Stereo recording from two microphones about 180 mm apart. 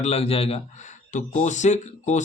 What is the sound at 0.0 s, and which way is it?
A man's voice, 35° left (ahead or behind).